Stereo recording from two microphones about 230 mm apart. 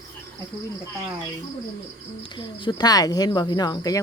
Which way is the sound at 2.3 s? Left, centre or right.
Centre.